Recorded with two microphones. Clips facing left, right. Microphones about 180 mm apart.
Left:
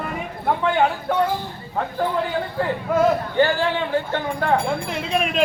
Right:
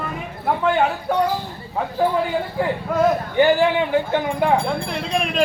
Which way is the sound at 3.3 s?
15° right (ahead or behind).